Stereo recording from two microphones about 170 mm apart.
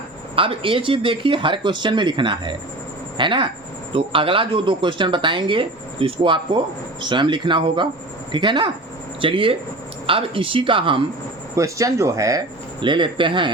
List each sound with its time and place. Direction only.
0.3 s a woman's voice: 30° right (ahead or behind)
11.5 s a woman's voice: 20° right (ahead or behind)